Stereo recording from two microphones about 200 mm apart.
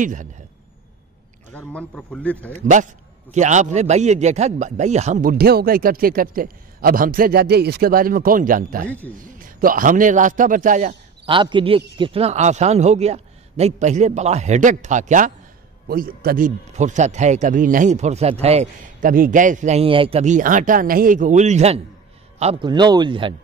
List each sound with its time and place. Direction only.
0.0 s speech: 40° right (ahead or behind)
1.5 s speech: 5° left (ahead or behind)
2.5 s a man's voice: 35° right (ahead or behind)
11.2 s a man's voice: 25° right (ahead or behind)